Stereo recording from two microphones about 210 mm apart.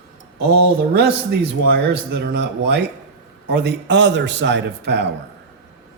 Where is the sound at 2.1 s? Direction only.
55° right (ahead or behind).